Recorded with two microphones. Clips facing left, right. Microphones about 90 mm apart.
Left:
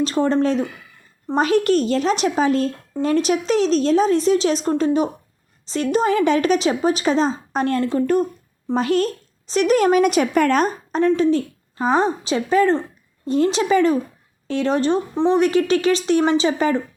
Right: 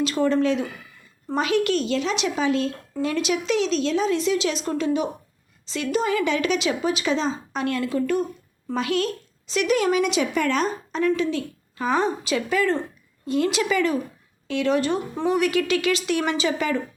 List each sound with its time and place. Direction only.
0.0 s speech: 35° left (ahead or behind)
1.4 s speech: 40° left (ahead or behind)
11.0 s a woman's voice: 35° left (ahead or behind)